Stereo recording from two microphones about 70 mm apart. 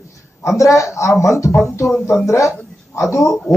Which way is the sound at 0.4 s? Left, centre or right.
Left.